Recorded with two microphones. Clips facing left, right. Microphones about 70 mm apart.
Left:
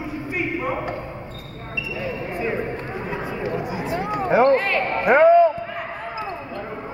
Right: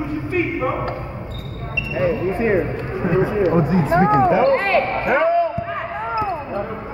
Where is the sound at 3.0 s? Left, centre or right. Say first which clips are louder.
Right 15 dB; right.